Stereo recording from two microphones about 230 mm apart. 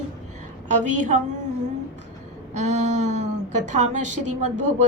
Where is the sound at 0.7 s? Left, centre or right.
Right.